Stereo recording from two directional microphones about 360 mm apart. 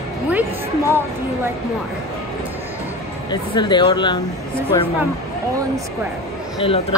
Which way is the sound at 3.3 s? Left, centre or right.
Centre.